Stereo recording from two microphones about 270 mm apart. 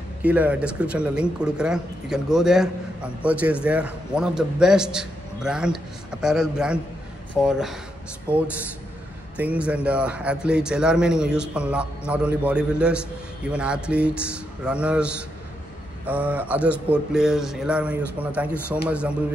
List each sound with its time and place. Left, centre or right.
0.2 s speech: centre
9.4 s speech: centre
16.1 s speech: centre